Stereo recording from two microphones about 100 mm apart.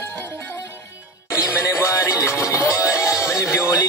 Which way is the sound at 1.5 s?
30° left (ahead or behind).